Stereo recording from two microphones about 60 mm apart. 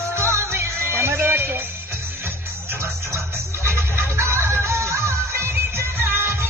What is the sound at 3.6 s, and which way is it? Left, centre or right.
Music, right.